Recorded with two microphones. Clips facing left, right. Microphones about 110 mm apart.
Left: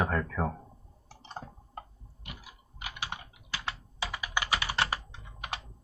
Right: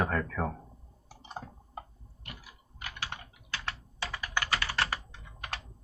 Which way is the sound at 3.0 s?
20° left (ahead or behind).